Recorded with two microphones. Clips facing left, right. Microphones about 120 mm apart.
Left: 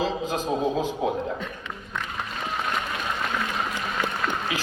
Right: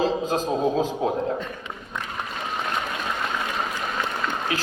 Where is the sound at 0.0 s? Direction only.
35° right (ahead or behind).